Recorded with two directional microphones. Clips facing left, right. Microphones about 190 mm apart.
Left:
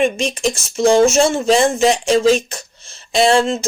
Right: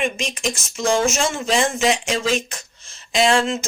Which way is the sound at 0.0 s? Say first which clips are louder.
Left 7 dB; 35° left (ahead or behind).